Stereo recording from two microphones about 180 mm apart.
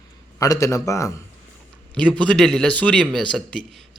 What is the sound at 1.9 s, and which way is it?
A man's voice, 5° left (ahead or behind).